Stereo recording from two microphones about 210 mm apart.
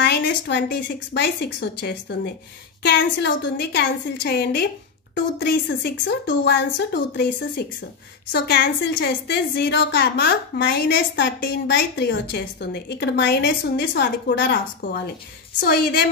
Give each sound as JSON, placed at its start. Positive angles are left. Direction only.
{"t": 0.0, "sound": "a woman's voice", "side_deg": 55}